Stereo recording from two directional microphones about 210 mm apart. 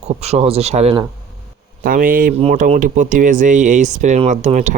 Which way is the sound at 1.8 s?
40° right (ahead or behind).